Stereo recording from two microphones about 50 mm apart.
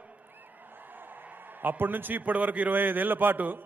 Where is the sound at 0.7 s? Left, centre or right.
Right.